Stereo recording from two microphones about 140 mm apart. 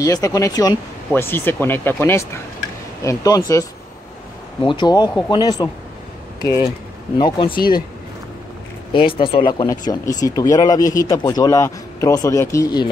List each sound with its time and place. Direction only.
0.0 s a man's voice: 25° left (ahead or behind)
1.1 s a man's voice: 15° left (ahead or behind); by 7.5 s 35° left (ahead or behind)
8.9 s a man's voice: 40° left (ahead or behind); by 12.8 s 20° left (ahead or behind)